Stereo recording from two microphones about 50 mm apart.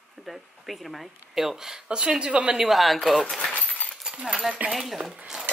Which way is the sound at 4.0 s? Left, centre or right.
Centre.